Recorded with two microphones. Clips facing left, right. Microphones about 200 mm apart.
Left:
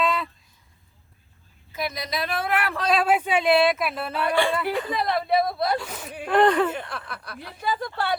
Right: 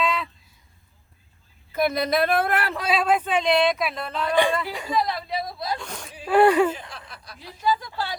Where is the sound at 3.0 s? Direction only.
10° left (ahead or behind).